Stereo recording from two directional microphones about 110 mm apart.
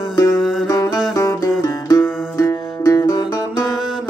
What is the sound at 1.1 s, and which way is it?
Music, 30° left (ahead or behind).